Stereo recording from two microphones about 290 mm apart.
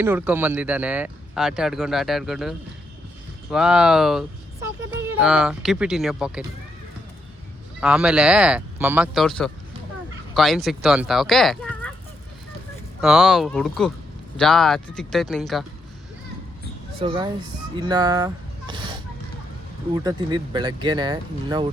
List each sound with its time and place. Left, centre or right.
0.0 s speech: centre
7.8 s speech: centre
13.0 s speech: centre
17.0 s speech: centre